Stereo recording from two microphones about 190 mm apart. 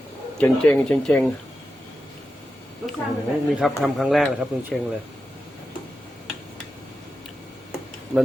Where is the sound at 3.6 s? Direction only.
Centre (ahead or behind).